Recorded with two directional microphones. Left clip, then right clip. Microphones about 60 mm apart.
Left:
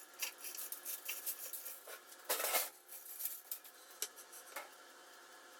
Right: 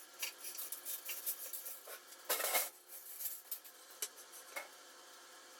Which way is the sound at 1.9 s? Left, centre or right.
Centre.